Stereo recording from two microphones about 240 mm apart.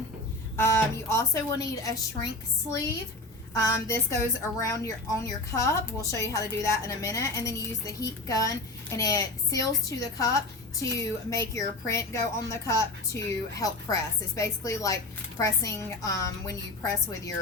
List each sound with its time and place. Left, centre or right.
0.5 s a woman's voice: centre
3.5 s a woman's voice: centre